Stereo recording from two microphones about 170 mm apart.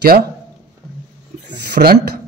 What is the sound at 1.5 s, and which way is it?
Speech, 65° right (ahead or behind).